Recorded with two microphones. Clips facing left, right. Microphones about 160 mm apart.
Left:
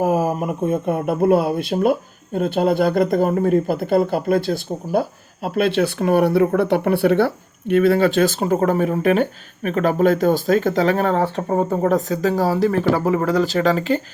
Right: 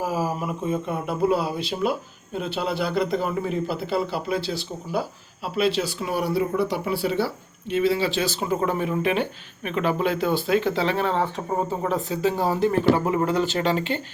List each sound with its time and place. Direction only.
0.0 s speech: 55° left (ahead or behind); by 14.0 s 40° left (ahead or behind)